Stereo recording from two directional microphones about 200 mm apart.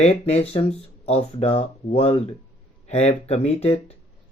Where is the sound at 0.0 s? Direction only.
30° left (ahead or behind).